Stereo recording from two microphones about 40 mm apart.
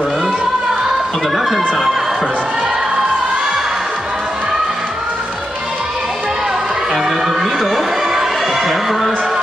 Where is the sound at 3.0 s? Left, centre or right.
Right.